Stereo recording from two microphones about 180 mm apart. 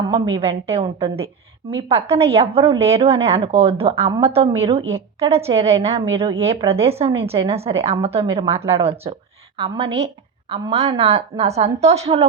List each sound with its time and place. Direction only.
0.1 s a woman's voice: 30° right (ahead or behind)